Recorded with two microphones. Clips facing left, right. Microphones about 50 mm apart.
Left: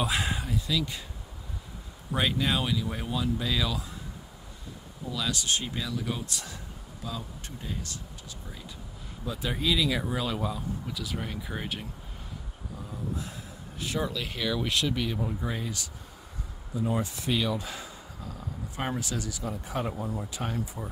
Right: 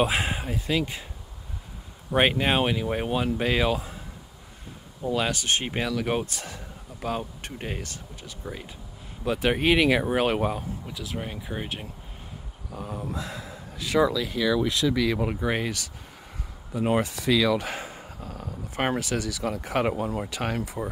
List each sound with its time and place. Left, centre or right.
0.0 s speech: right
0.6 s speech: right
2.1 s speech: right
5.0 s speech: right
5.8 s speech: right
6.2 s speech: right
7.0 s speech: right
7.8 s speech: right
9.2 s speech: right
10.9 s speech: centre
12.7 s speech: right
15.1 s speech: right
17.6 s speech: right
19.3 s speech: right